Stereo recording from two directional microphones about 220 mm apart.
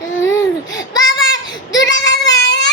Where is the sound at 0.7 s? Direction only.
15° left (ahead or behind).